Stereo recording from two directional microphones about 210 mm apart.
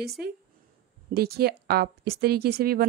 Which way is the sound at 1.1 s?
50° right (ahead or behind).